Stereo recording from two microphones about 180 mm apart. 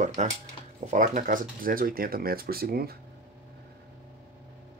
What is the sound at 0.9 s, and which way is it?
Speech, 45° right (ahead or behind).